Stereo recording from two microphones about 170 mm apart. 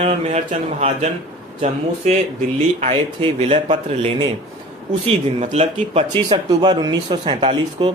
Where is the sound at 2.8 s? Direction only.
35° right (ahead or behind).